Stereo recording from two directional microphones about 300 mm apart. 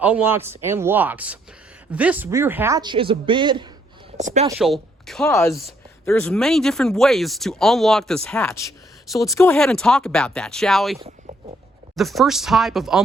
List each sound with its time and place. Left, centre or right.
0.0 s speech: centre; by 4.4 s right
4.5 s speech: centre
10.9 s a sound: centre
11.9 s speech: centre